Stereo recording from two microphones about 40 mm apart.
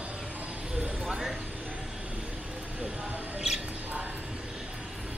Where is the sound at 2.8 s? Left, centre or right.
Right.